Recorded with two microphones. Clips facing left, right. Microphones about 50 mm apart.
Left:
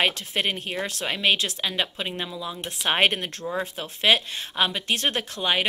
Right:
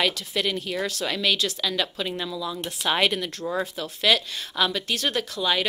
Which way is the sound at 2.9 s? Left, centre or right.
Left.